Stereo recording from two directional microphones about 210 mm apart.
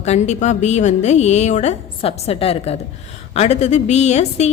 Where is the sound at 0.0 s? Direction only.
30° left (ahead or behind).